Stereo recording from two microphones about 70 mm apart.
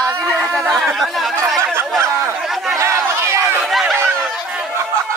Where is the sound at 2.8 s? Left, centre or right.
Right.